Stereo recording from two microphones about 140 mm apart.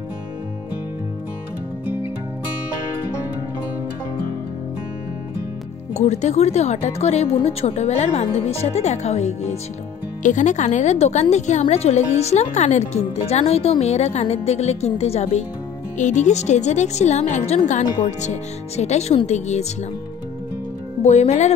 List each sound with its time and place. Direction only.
5.9 s speech: 55° left (ahead or behind)
21.0 s speech: 50° left (ahead or behind)